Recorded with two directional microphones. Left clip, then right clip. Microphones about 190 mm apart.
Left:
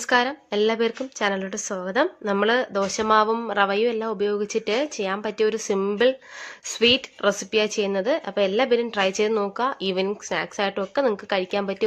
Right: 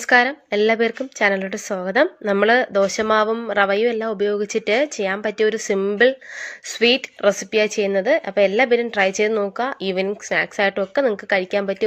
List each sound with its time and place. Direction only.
0.0 s a woman's voice: 15° right (ahead or behind)